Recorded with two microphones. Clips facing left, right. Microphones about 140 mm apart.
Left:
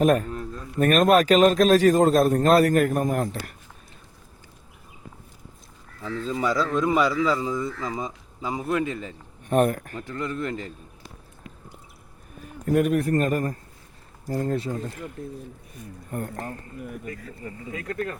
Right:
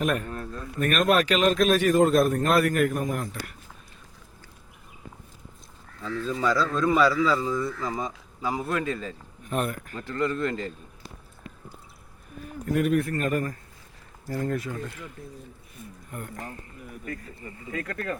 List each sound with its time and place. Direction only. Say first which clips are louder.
0.0 s speech: left 7 dB; 35° left (ahead or behind)
6.0 s a man's voice: left 1 dB; 25° left (ahead or behind)
9.5 s speech: left 8 dB; 40° left (ahead or behind)
10.0 s speech: right 7 dB; 15° left (ahead or behind)
12.6 s speech: left 3 dB; 45° left (ahead or behind); by 14.9 s 30° left (ahead or behind)
16.1 s speech: left 6 dB; 40° left (ahead or behind)